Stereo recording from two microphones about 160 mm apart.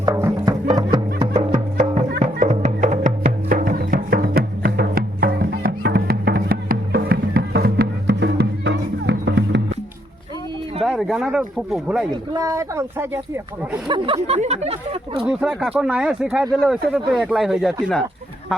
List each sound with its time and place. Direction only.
0.0 s music: 15° right (ahead or behind)
2.4 s music: 45° right (ahead or behind); by 9.6 s 90° right
10.8 s speech: centre (ahead or behind)
12.1 s speech: 25° right (ahead or behind)
13.8 s speech: 35° right (ahead or behind)
15.7 s speech: 5° right (ahead or behind)